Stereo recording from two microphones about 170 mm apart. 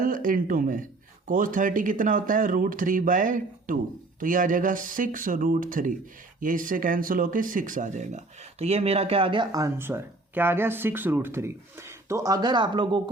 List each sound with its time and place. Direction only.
0.0 s speech: 55° right (ahead or behind); by 13.0 s 30° right (ahead or behind)